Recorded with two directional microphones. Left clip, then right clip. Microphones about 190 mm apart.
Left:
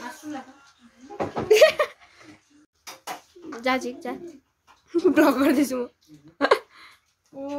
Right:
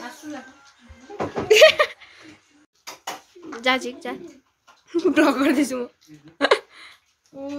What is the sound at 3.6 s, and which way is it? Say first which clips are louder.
Speech: right 3 dB; centre (ahead or behind).